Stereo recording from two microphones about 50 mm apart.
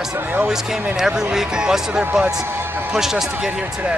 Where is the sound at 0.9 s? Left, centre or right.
Centre.